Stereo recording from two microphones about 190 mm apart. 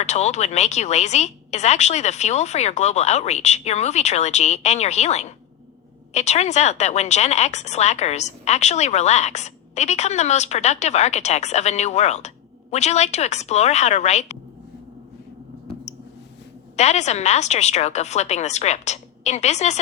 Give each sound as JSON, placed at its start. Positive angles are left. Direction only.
{"t": 0.0, "sound": "a woman's voice", "side_deg": 35}
{"t": 16.7, "sound": "a woman's voice", "side_deg": 35}